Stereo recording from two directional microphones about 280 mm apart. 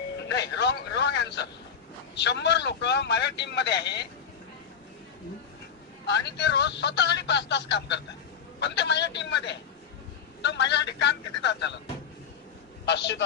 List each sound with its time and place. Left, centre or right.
0.2 s a man's voice: left
6.1 s a man's voice: left
12.8 s a man's voice: left